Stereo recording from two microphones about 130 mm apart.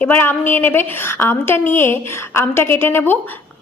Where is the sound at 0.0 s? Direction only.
15° left (ahead or behind).